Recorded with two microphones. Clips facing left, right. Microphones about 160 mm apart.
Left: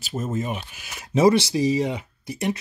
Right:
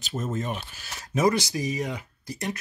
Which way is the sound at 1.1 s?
25° left (ahead or behind).